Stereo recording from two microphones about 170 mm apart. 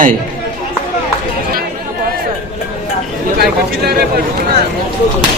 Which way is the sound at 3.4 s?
70° right (ahead or behind).